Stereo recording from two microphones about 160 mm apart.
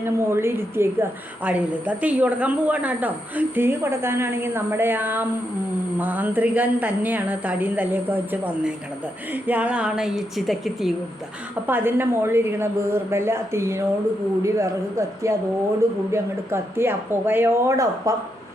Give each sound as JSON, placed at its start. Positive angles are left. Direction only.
{"t": 0.0, "sound": "a woman's voice", "side_deg": -15}
{"t": 11.6, "sound": "a woman's voice", "side_deg": -15}